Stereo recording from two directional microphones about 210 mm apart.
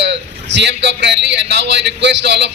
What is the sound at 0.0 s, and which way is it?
A man's voice, 55° right (ahead or behind).